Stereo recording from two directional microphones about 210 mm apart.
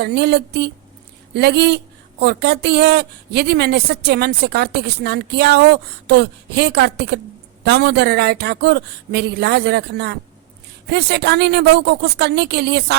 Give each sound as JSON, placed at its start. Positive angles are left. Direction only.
{"t": 0.0, "sound": "a woman's voice", "side_deg": -50}